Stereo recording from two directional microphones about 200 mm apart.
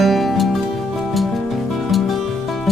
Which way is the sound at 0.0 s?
Centre (ahead or behind).